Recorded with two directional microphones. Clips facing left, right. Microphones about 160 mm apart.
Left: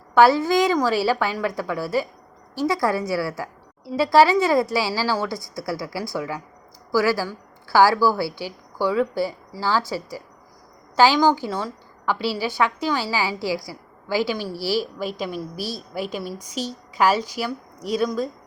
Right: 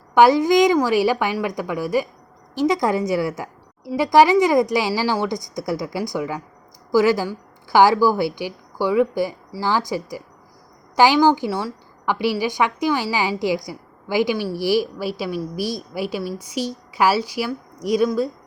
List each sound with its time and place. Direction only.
0.1 s a woman's voice: 15° right (ahead or behind)